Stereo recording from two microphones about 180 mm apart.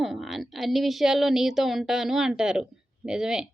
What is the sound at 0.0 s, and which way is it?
A woman's voice, centre (ahead or behind).